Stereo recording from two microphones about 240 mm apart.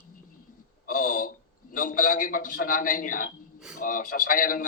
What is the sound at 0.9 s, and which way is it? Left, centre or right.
A man's voice, left.